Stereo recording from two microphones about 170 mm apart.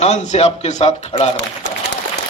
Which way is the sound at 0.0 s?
40° left (ahead or behind).